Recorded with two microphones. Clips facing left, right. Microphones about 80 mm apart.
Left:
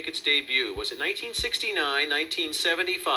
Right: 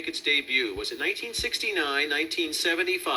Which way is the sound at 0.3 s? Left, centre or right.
Left.